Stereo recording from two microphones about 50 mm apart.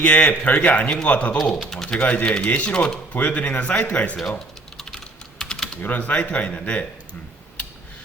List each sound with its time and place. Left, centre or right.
0.0 s speech: left
0.5 s speech: left
3.1 s speech: left
4.2 s typing: centre
5.8 s speech: left